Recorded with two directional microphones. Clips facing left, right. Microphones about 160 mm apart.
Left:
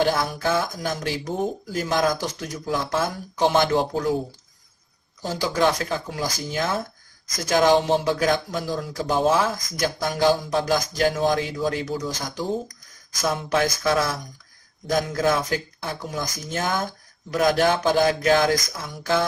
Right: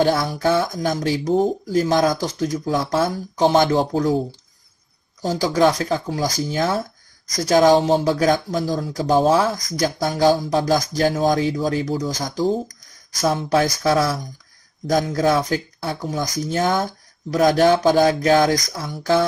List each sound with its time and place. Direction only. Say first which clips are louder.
0.0 s speech: right 4 dB; 35° right (ahead or behind)
5.2 s speech: right 5 dB; 35° right (ahead or behind)